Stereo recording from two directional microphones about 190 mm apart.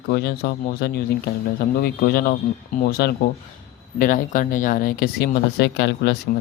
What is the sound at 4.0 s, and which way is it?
Speech, 45° left (ahead or behind).